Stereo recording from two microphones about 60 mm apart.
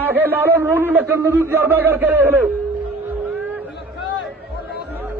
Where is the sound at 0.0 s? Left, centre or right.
Right.